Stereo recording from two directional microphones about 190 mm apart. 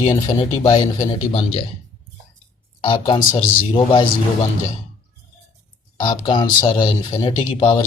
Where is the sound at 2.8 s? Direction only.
25° left (ahead or behind).